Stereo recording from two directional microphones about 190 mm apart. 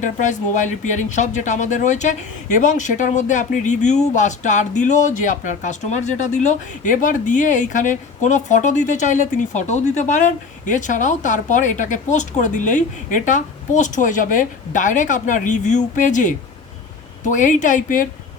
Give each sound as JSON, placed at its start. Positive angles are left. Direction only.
{"t": 0.0, "sound": "speech", "side_deg": 40}